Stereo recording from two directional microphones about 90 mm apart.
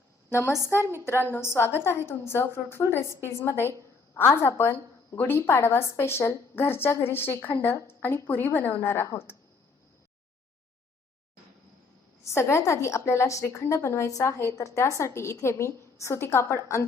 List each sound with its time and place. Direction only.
0.3 s a woman's voice: 30° left (ahead or behind)
12.2 s a woman's voice: 30° left (ahead or behind)